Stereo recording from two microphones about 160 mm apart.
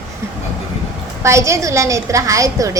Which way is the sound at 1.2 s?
20° right (ahead or behind).